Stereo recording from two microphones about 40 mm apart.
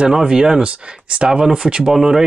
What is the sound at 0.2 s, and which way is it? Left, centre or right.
Speech, centre.